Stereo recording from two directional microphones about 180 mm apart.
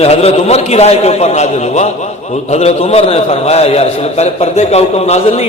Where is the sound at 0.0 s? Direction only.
35° left (ahead or behind).